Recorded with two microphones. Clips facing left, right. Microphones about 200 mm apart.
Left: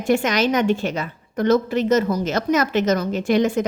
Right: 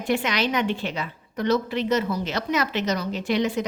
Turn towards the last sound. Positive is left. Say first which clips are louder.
# left 5 dB
turn(degrees=50)  # may be behind; listen again after turning